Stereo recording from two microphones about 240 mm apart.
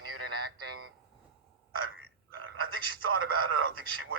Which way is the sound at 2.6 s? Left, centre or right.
Right.